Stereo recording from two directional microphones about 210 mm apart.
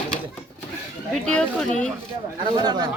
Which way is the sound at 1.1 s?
5° left (ahead or behind).